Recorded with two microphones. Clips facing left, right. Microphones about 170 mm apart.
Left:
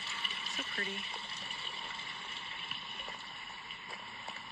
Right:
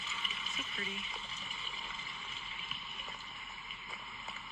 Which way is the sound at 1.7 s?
35° left (ahead or behind).